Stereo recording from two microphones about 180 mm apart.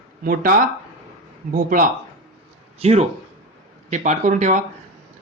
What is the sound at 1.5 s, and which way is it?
Speech, 50° right (ahead or behind).